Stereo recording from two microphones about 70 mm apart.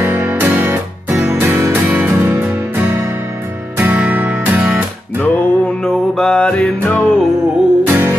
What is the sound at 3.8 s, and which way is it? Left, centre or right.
Music, right.